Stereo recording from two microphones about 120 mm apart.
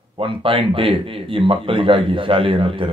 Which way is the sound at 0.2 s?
45° right (ahead or behind).